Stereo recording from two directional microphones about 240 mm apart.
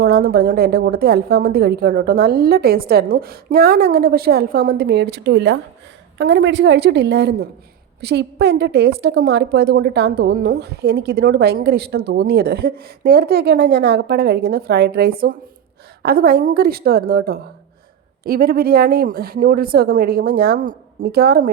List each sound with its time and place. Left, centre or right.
0.0 s a woman's voice: right